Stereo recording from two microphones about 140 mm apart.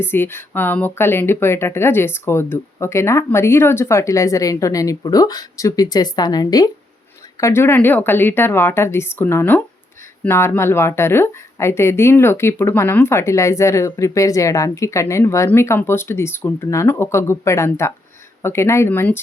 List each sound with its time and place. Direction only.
0.0 s speech: 15° left (ahead or behind)